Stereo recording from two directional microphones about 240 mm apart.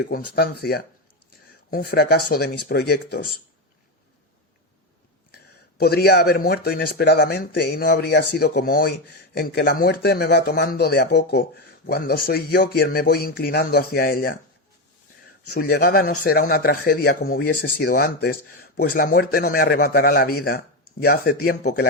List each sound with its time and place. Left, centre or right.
0.0 s speech: left
5.3 s speech: left
15.4 s speech: left